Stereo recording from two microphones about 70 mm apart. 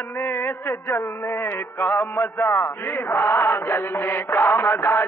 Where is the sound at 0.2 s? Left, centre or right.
Left.